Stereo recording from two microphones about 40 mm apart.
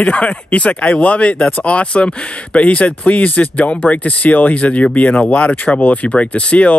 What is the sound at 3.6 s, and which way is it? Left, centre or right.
Speech, left.